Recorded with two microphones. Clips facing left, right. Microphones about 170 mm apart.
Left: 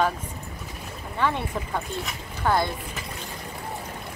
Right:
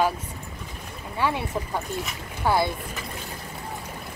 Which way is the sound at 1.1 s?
10° right (ahead or behind).